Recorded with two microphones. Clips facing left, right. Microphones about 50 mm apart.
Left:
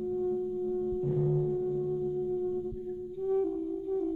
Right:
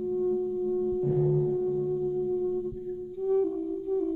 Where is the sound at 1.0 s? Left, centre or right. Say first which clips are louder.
Right 4 dB; centre.